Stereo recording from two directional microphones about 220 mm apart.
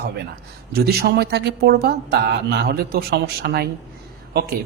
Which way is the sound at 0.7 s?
45° right (ahead or behind).